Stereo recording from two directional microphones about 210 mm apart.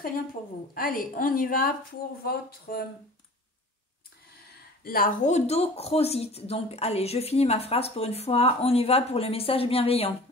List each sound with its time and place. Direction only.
0.7 s a woman's voice: 40° left (ahead or behind)
4.8 s speech: 40° left (ahead or behind)